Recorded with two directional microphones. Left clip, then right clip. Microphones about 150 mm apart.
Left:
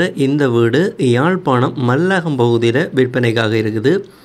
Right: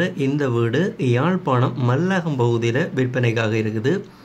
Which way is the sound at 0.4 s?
35° left (ahead or behind).